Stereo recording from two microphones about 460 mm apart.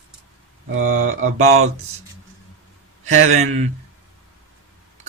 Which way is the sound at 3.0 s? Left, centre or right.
Right.